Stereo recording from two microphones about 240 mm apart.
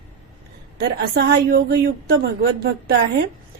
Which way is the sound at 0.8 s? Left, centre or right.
Right.